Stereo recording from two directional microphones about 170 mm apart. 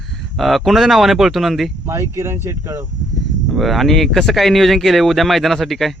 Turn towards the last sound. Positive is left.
turn(degrees=0)  # may be behind; listen again after turning